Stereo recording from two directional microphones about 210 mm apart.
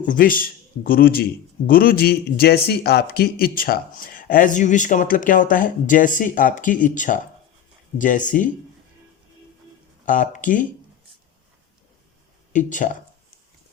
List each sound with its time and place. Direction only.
0.0 s a man's voice: 40° left (ahead or behind)
10.1 s a man's voice: 40° left (ahead or behind)
12.5 s a man's voice: 40° left (ahead or behind)